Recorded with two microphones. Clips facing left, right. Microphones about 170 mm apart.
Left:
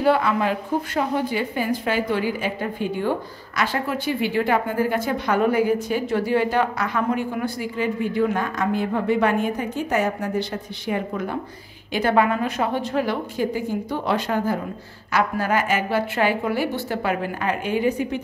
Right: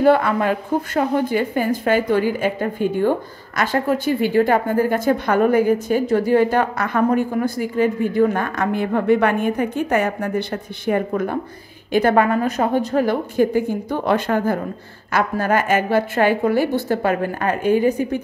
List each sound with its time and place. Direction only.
0.0 s a woman's voice: 50° right (ahead or behind)